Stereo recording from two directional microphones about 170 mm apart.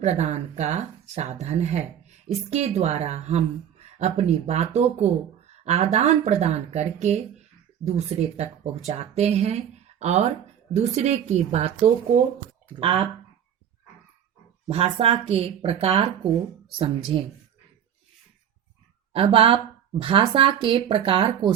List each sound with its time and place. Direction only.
0.0 s speech: 40° right (ahead or behind)
14.7 s speech: 35° right (ahead or behind)
19.1 s speech: 35° right (ahead or behind)